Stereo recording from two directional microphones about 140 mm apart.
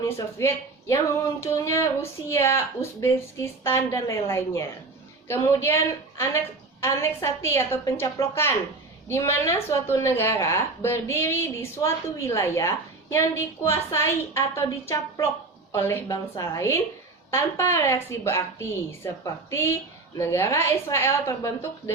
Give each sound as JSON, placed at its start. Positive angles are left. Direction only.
{"t": 0.0, "sound": "a woman's voice", "side_deg": 20}